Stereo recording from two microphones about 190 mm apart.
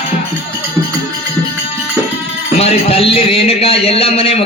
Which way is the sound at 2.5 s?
30° left (ahead or behind).